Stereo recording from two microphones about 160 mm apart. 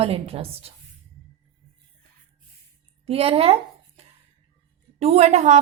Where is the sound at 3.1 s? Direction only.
40° right (ahead or behind).